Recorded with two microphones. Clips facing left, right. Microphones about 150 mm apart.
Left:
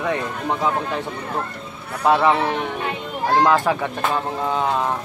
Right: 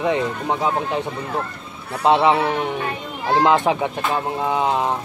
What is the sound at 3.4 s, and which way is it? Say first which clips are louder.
A man's voice: right 2 dB; 20° right (ahead or behind).